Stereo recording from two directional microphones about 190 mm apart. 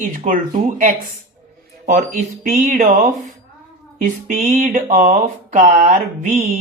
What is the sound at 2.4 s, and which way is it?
Speech, 45° right (ahead or behind).